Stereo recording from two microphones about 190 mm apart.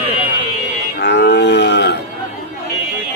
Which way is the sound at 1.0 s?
65° left (ahead or behind).